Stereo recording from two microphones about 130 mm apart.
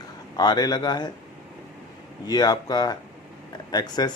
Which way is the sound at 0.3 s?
30° left (ahead or behind).